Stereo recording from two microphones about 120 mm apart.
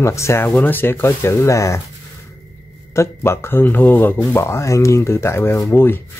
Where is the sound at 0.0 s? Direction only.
25° left (ahead or behind).